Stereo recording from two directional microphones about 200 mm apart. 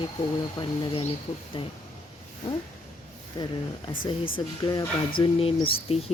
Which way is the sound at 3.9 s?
25° left (ahead or behind).